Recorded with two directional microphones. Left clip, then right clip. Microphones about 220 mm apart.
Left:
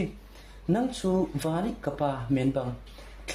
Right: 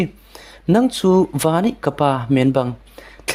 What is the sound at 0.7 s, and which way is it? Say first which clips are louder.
Speech: right 12 dB; 50° right (ahead or behind).